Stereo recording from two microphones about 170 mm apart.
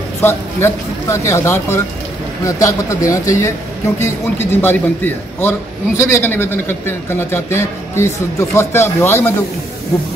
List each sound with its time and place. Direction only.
0.2 s a man's voice: 15° left (ahead or behind)